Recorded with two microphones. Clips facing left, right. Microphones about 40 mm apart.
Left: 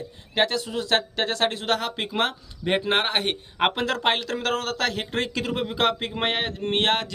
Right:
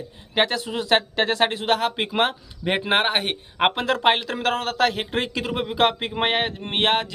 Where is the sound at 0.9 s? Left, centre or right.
Right.